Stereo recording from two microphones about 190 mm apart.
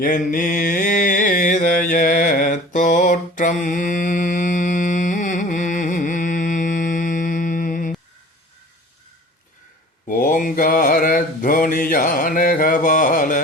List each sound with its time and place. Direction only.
0.0 s mantra: 45° left (ahead or behind)
10.1 s mantra: 45° left (ahead or behind)